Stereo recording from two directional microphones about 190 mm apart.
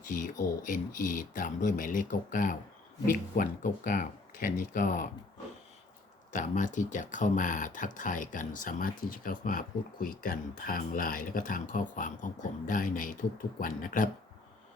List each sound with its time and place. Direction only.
0.6 s speech: 45° left (ahead or behind)
6.3 s speech: 40° left (ahead or behind)